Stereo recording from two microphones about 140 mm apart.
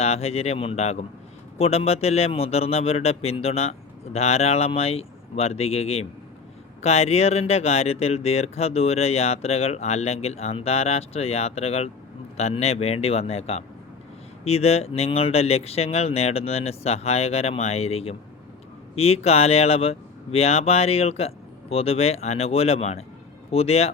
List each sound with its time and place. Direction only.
0.0 s speech: 50° left (ahead or behind)